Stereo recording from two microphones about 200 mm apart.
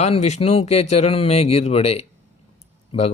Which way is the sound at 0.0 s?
35° left (ahead or behind).